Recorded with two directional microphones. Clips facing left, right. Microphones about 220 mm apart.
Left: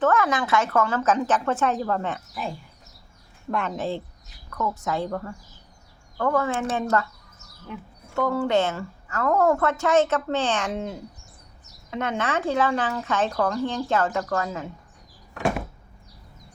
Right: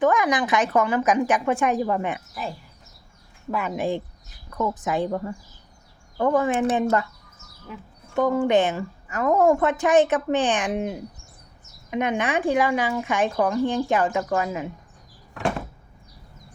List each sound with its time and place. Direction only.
0.0 s a woman's voice: 15° right (ahead or behind)
3.5 s a woman's voice: 10° right (ahead or behind)
7.7 s speech: centre (ahead or behind)
8.1 s a woman's voice: 20° right (ahead or behind)